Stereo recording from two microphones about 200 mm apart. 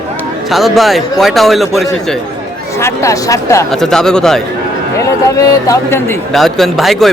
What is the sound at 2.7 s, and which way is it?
Speech, 15° left (ahead or behind).